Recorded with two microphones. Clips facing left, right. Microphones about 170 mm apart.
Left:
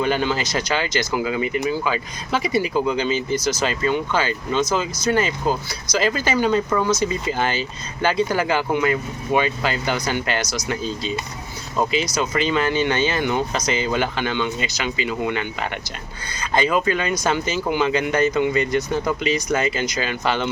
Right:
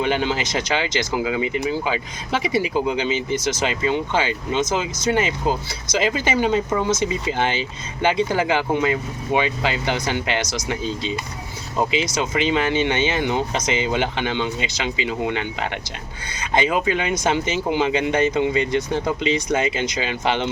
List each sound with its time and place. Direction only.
0.0 s speech: 20° right (ahead or behind)
11.8 s speech: 20° right (ahead or behind)